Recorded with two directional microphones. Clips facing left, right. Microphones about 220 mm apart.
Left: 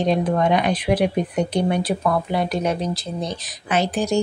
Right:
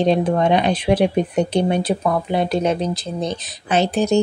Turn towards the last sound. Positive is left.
turn(degrees=-25)  # may be behind; listen again after turning